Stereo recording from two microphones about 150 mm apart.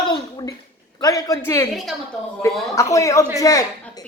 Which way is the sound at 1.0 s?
25° left (ahead or behind).